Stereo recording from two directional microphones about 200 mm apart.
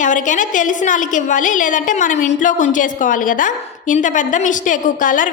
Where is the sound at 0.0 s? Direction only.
40° left (ahead or behind).